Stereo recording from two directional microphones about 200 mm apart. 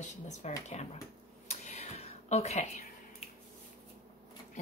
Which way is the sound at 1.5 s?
35° left (ahead or behind).